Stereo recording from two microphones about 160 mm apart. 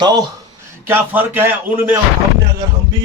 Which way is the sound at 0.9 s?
15° right (ahead or behind).